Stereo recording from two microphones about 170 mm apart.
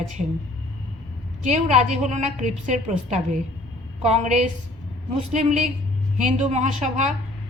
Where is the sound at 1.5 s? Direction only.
40° right (ahead or behind).